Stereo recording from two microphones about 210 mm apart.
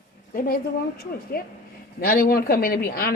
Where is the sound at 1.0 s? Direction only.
45° left (ahead or behind).